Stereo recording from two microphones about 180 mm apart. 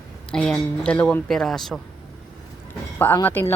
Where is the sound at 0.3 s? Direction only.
5° left (ahead or behind).